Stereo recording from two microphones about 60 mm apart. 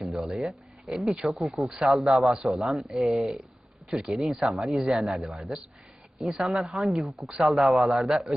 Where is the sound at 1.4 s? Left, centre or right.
Centre.